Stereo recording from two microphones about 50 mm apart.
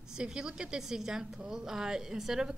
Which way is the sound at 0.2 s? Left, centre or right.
Centre.